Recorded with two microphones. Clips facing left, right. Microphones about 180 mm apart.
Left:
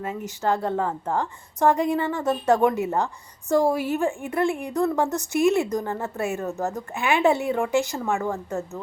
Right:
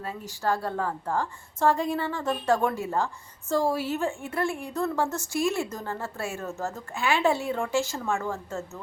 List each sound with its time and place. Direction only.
0.3 s a woman's voice: 20° left (ahead or behind)